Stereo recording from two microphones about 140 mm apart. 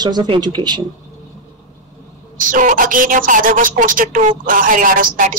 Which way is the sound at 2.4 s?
75° right (ahead or behind).